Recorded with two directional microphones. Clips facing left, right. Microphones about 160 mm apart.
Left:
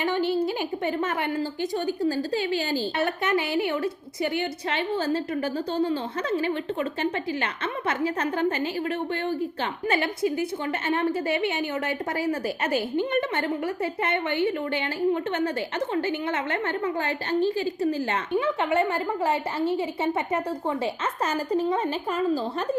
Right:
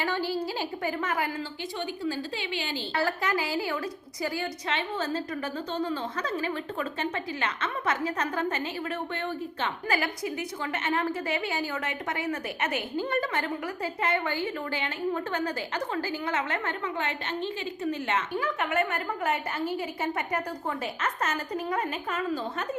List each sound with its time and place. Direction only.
0.0 s a woman's voice: 20° left (ahead or behind)
2.0 s a woman's voice: 40° left (ahead or behind)
3.0 s a woman's voice: 25° left (ahead or behind)
9.9 s a woman's voice: 25° left (ahead or behind)